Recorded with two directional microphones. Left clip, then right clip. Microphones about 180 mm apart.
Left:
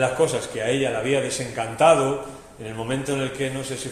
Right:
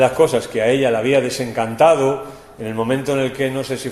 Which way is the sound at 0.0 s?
45° right (ahead or behind).